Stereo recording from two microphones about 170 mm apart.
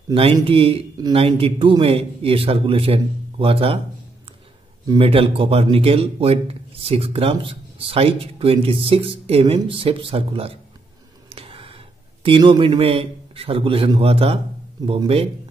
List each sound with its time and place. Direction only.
0.1 s speech: 35° right (ahead or behind)
4.8 s a man's voice: 30° right (ahead or behind)